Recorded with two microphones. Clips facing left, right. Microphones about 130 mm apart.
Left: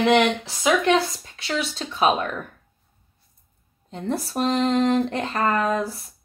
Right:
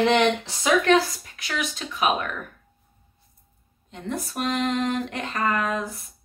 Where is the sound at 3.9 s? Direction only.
35° left (ahead or behind).